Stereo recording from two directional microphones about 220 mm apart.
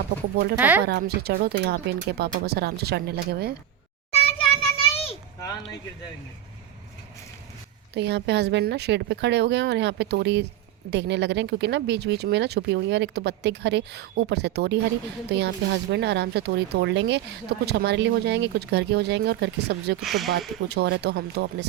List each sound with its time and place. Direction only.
0.5 s speech: 5° right (ahead or behind)
0.9 s speech: 45° right (ahead or behind)
4.1 s children playing: 25° left (ahead or behind)
7.9 s speech: 50° right (ahead or behind)
20.0 s speech: centre (ahead or behind)
20.7 s speech: 50° right (ahead or behind)